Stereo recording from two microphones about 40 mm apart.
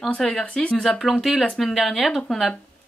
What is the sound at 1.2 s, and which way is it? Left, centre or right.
Speech, centre.